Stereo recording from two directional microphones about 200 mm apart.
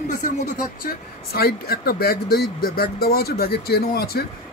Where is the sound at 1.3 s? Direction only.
50° left (ahead or behind).